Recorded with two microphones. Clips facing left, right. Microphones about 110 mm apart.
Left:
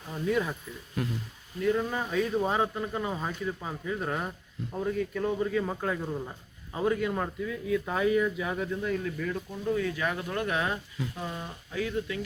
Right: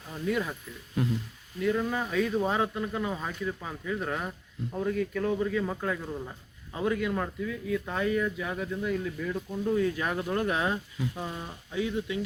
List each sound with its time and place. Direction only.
0.1 s speech: centre (ahead or behind)
1.6 s speech: 5° left (ahead or behind)
9.7 s speech: 35° right (ahead or behind)
11.0 s speech: 10° right (ahead or behind)
11.7 s speech: 20° right (ahead or behind)